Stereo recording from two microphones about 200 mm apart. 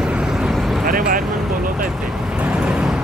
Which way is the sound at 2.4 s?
5° right (ahead or behind).